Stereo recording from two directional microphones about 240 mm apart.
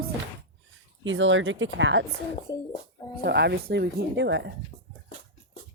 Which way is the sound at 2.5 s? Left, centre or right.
Centre.